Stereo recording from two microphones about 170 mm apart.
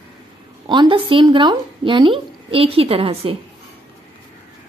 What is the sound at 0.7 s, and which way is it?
Speech, 30° right (ahead or behind).